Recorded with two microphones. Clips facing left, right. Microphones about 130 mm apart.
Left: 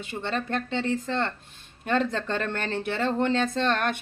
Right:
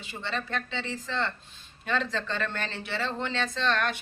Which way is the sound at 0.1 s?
50° left (ahead or behind).